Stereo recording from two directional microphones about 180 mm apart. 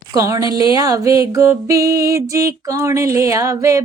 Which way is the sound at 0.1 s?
15° right (ahead or behind).